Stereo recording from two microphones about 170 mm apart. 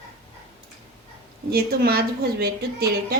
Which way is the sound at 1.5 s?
65° right (ahead or behind).